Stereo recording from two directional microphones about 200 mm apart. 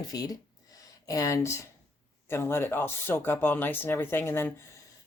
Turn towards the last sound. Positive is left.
turn(degrees=10)  # may be behind; listen again after turning